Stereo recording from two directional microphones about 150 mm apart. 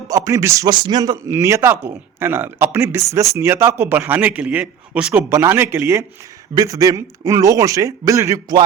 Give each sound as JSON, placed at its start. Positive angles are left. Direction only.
{"t": 0.1, "sound": "a man's voice", "side_deg": -20}